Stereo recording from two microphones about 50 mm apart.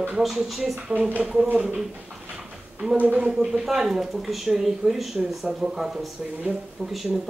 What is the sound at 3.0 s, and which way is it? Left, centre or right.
Speech, right.